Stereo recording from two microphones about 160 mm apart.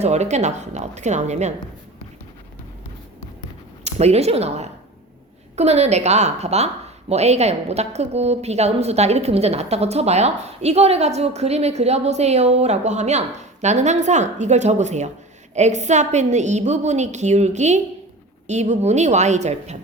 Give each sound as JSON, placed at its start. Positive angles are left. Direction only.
{"t": 0.0, "sound": "a woman's voice", "side_deg": -45}
{"t": 3.8, "sound": "a woman's voice", "side_deg": -40}